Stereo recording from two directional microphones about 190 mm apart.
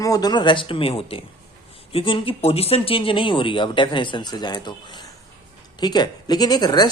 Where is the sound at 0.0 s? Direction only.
20° left (ahead or behind).